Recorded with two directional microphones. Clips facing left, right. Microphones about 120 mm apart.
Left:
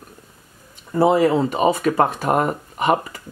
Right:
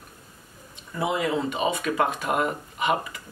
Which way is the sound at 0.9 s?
40° left (ahead or behind).